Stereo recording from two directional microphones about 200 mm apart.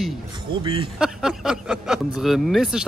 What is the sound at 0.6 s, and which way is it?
Speech, 25° right (ahead or behind).